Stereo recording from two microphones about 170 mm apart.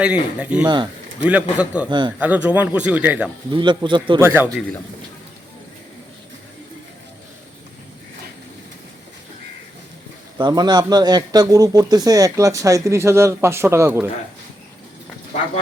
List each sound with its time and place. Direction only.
0.0 s speech: 5° right (ahead or behind)
1.9 s a man's voice: 25° right (ahead or behind)
2.1 s speech: 10° right (ahead or behind)
3.5 s a man's voice: 25° right (ahead or behind)
4.2 s speech: 10° right (ahead or behind)
10.3 s a man's voice: 25° right (ahead or behind)